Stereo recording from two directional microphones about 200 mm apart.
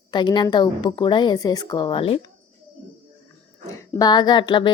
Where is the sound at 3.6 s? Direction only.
15° left (ahead or behind).